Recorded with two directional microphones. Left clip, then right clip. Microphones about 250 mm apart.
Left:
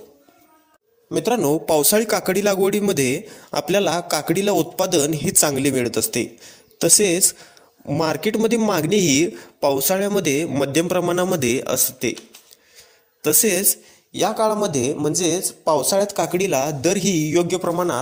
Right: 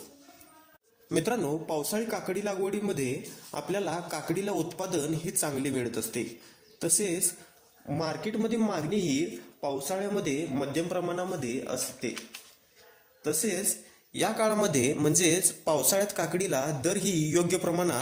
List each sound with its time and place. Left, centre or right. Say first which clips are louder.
1.3 s a man's voice: left 12 dB; left
13.2 s speech: left 12 dB; left
14.1 s speech: left 8 dB; left